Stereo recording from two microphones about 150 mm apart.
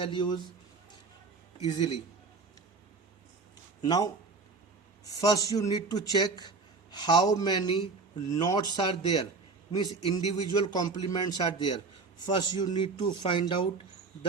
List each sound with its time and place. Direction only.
0.0 s speech: 30° left (ahead or behind)
3.8 s speech: 25° left (ahead or behind)